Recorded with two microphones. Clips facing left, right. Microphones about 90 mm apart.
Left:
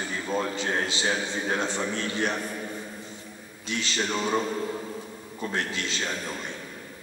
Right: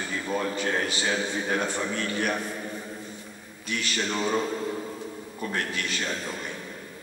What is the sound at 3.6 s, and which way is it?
Speech, 25° left (ahead or behind).